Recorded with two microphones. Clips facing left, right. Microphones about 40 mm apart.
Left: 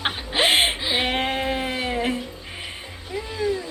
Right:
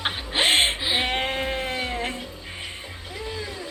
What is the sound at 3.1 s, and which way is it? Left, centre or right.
Music, left.